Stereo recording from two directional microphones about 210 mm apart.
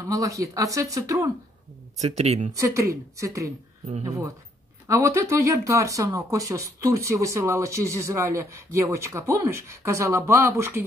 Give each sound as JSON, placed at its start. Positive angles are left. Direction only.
{"t": 0.0, "sound": "speech", "side_deg": -15}
{"t": 2.0, "sound": "speech", "side_deg": -30}
{"t": 2.5, "sound": "speech", "side_deg": -15}
{"t": 4.8, "sound": "speech", "side_deg": -15}